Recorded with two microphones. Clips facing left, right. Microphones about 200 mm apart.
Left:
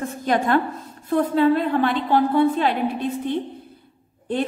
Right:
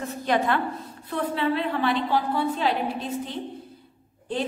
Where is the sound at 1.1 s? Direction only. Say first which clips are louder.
Left 8 dB; 45° left (ahead or behind).